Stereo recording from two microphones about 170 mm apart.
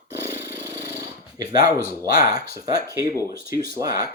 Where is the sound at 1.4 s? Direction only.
20° right (ahead or behind).